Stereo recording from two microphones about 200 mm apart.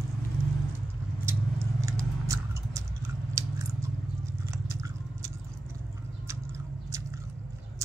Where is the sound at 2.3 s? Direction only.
15° right (ahead or behind).